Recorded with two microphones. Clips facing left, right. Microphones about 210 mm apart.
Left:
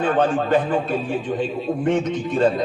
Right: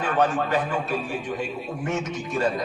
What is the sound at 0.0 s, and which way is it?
Speech, 30° left (ahead or behind).